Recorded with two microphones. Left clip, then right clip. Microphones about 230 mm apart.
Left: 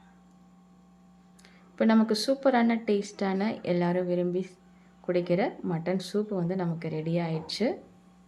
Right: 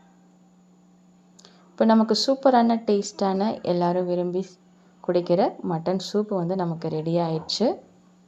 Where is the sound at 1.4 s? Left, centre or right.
Centre.